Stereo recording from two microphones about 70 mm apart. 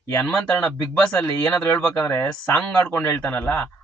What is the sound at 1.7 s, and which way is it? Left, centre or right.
A man's voice, left.